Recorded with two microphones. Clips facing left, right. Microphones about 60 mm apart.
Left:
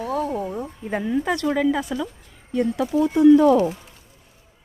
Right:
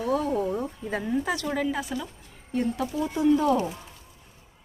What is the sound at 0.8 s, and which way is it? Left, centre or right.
Speech, left.